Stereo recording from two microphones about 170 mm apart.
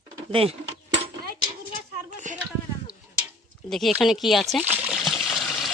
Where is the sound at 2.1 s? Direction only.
45° right (ahead or behind).